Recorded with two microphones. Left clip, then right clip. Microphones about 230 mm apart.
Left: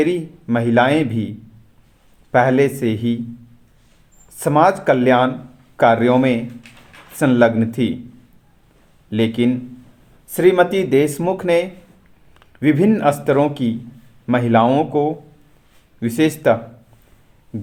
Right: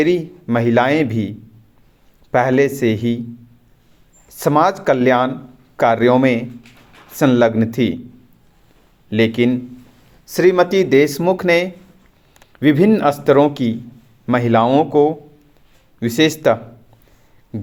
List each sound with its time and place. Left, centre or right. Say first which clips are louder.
0.0 s speech: right 2 dB; right
2.3 s speech: even; right
4.3 s speech: even; right
9.0 s speech: right 3 dB; right